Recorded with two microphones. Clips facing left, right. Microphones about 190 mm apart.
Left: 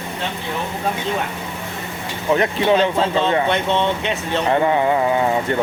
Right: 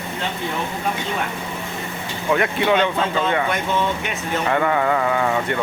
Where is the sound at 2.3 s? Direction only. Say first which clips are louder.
Left 2 dB; 30° left (ahead or behind).